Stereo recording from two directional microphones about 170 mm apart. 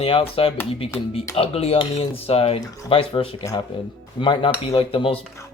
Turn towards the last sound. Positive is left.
turn(degrees=30)  # may be behind; listen again after turning